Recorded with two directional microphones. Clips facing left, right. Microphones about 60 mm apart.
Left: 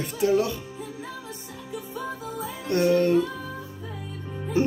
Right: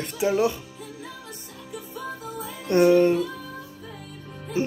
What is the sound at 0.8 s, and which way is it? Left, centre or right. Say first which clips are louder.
Music: left 3 dB; left.